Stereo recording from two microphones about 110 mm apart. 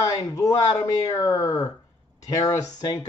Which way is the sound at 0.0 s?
30° left (ahead or behind).